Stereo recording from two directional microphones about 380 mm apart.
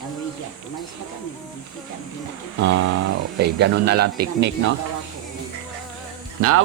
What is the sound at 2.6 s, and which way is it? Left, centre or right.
Speech, right.